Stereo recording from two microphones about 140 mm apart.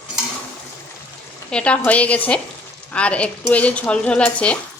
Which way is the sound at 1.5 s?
10° left (ahead or behind).